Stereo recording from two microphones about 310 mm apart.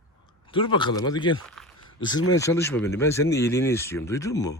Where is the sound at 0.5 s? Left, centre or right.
Centre.